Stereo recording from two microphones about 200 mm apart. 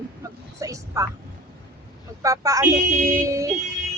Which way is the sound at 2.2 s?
15° right (ahead or behind).